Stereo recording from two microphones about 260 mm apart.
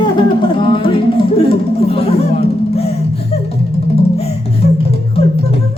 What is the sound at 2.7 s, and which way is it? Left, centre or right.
Music, left.